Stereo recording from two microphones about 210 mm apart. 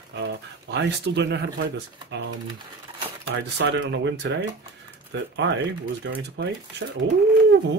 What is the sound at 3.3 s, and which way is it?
Speech, 55° right (ahead or behind).